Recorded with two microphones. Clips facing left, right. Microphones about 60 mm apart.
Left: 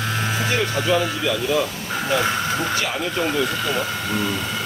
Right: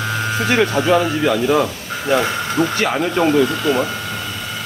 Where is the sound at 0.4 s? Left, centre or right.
Right.